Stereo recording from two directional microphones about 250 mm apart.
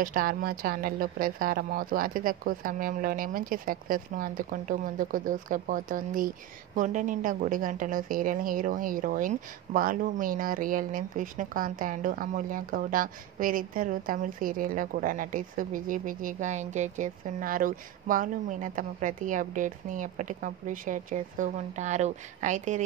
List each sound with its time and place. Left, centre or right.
0.0 s speech: right